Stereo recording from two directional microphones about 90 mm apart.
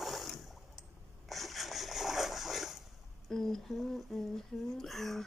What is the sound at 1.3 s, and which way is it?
Splash, centre (ahead or behind).